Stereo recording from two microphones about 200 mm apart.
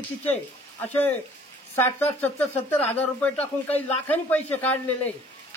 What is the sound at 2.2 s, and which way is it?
A man's voice, 10° left (ahead or behind).